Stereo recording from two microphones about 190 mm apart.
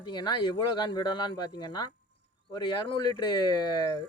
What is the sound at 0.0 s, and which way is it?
Speech, 25° left (ahead or behind).